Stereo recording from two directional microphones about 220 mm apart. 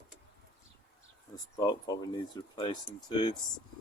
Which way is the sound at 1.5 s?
15° left (ahead or behind).